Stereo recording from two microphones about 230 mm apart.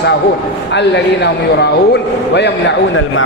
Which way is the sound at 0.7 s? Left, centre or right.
Left.